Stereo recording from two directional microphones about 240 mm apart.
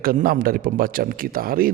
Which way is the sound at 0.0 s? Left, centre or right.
Right.